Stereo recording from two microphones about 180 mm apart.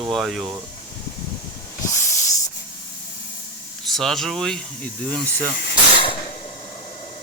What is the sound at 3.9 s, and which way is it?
Speech, centre (ahead or behind).